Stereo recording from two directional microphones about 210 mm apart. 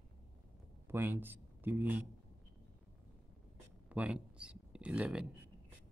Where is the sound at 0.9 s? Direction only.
10° right (ahead or behind).